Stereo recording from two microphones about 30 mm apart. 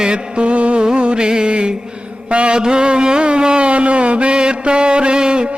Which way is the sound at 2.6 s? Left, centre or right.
Right.